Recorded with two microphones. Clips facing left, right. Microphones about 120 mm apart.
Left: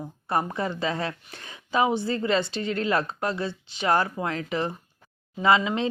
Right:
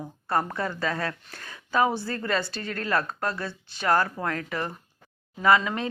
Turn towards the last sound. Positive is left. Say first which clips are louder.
# even
turn(degrees=20)  # may be behind; listen again after turning